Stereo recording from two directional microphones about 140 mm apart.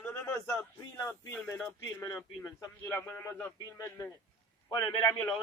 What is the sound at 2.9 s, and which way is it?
Speech, 15° left (ahead or behind).